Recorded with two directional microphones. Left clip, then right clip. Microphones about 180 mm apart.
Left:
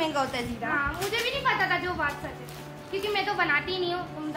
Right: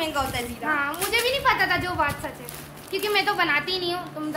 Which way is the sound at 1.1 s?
60° right (ahead or behind).